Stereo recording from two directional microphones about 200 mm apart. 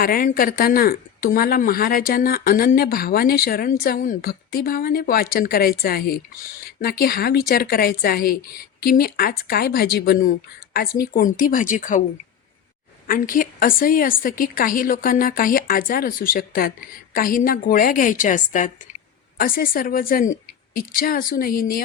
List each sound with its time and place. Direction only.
0.0 s speech: 45° left (ahead or behind)
13.1 s speech: 45° left (ahead or behind)